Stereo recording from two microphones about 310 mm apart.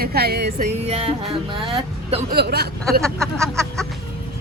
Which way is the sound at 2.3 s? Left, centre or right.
Right.